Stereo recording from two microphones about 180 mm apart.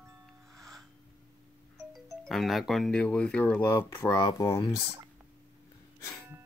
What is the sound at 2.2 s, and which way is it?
Speech, centre (ahead or behind).